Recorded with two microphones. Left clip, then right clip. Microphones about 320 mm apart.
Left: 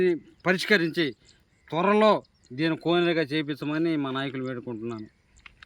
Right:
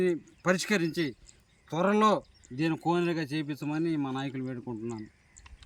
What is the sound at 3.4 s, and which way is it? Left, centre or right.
Speech, centre.